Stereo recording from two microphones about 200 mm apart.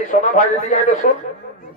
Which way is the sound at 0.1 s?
40° left (ahead or behind).